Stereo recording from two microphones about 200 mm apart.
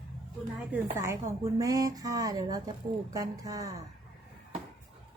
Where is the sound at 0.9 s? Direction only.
15° right (ahead or behind).